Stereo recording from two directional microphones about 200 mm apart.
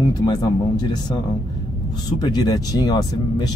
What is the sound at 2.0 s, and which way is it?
Speech, 20° left (ahead or behind).